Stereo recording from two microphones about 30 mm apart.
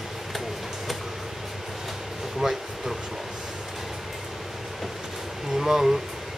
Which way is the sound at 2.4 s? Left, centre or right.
Centre.